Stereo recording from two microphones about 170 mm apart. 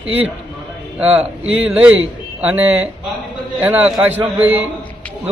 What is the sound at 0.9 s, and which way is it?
A man's voice, 10° right (ahead or behind).